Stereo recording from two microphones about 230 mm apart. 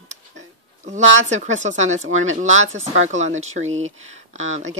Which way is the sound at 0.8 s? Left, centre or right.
Right.